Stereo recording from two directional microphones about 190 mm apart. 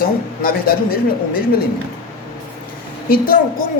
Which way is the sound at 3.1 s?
50° left (ahead or behind).